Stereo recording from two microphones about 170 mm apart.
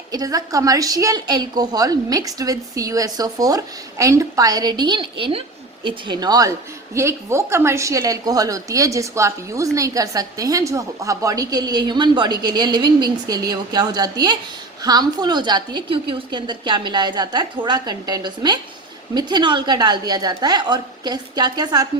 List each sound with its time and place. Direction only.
0.1 s a woman's voice: 20° right (ahead or behind)